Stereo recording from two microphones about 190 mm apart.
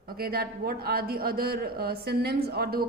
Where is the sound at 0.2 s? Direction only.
55° right (ahead or behind).